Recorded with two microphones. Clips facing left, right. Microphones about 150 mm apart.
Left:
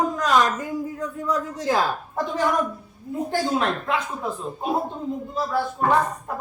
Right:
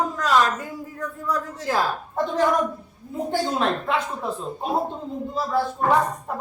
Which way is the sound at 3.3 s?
Centre (ahead or behind).